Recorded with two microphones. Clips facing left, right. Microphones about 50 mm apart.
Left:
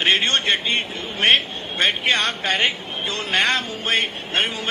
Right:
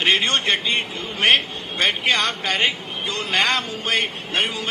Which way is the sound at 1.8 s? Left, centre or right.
Left.